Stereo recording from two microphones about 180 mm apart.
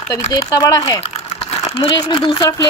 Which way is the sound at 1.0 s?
30° left (ahead or behind).